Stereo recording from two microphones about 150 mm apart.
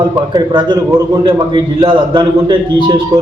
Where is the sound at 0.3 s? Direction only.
25° right (ahead or behind).